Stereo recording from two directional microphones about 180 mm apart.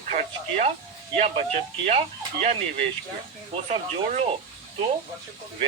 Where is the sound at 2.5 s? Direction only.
35° right (ahead or behind).